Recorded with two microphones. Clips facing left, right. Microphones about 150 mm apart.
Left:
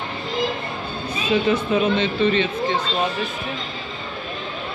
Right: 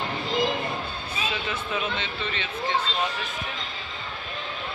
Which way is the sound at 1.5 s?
35° left (ahead or behind).